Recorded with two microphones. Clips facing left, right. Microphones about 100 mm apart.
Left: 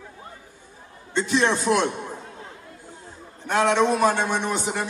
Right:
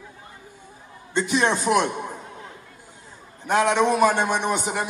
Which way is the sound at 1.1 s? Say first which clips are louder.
Even; 20° right (ahead or behind).